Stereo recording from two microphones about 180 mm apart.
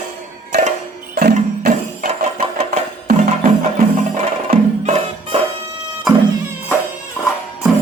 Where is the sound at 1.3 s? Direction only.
45° right (ahead or behind).